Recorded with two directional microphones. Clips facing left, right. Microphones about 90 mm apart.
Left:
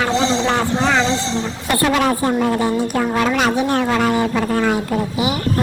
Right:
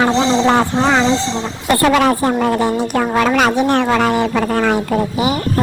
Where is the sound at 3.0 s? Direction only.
70° right (ahead or behind).